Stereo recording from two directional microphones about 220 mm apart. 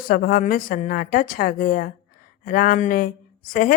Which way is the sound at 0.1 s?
40° left (ahead or behind).